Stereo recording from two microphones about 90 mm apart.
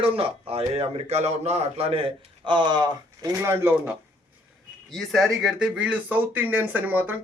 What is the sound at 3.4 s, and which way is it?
Speech, 25° right (ahead or behind).